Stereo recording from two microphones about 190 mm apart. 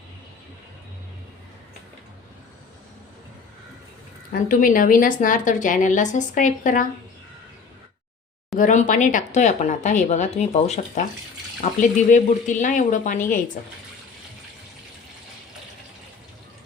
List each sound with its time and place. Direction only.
4.3 s a woman's voice: 45° left (ahead or behind)
8.5 s speech: 40° left (ahead or behind)